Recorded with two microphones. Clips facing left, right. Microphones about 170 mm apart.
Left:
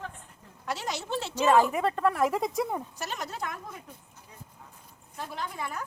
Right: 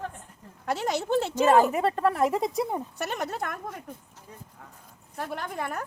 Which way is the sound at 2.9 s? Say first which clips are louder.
Right 5 dB; 60° right (ahead or behind).